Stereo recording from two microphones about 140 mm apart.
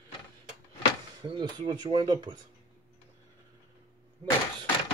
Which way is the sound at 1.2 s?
35° right (ahead or behind).